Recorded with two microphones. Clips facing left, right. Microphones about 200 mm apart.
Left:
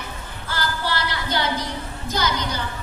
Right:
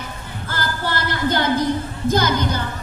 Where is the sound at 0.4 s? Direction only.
50° right (ahead or behind).